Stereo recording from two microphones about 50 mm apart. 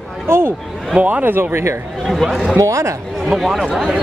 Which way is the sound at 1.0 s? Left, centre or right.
Right.